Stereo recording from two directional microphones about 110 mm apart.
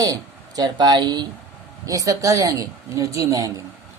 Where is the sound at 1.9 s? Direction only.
30° right (ahead or behind).